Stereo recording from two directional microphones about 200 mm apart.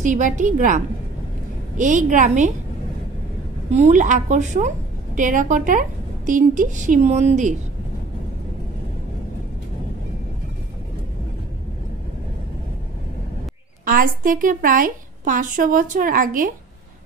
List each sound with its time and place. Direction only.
0.0 s a woman's voice: 40° right (ahead or behind)
3.7 s a woman's voice: 35° right (ahead or behind)
13.8 s a woman's voice: 45° right (ahead or behind)